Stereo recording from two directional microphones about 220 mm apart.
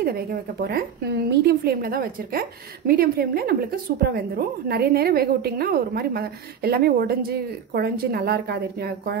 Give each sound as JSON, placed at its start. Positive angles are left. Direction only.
{"t": 0.0, "sound": "a woman's voice", "side_deg": -45}